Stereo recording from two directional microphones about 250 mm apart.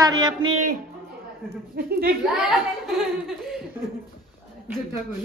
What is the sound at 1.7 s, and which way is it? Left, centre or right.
Speech, right.